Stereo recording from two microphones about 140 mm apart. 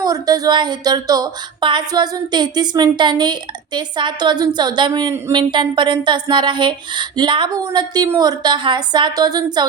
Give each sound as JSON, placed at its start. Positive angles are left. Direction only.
{"t": 0.0, "sound": "speech", "side_deg": -25}